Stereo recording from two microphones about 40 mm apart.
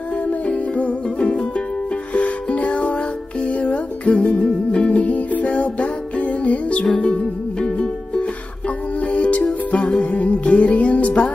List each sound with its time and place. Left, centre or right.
0.3 s music: left; by 7.9 s centre
8.2 s music: left